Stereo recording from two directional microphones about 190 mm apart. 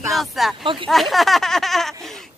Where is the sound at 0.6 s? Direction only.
25° right (ahead or behind).